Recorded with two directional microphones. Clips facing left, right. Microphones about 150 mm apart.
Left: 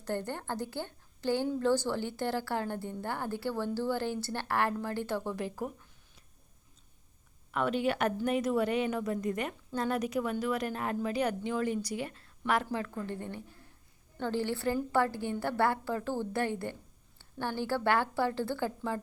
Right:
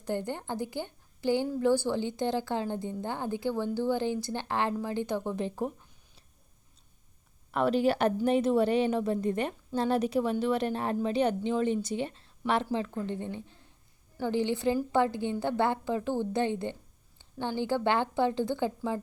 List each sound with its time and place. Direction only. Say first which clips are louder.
0.0 s a woman's voice: right 2 dB; 15° right (ahead or behind)
7.5 s a woman's voice: right 4 dB; 35° right (ahead or behind); by 18.9 s 15° right (ahead or behind)